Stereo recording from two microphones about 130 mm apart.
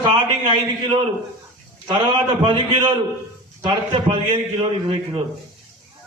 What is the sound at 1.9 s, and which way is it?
A man's voice, 35° right (ahead or behind).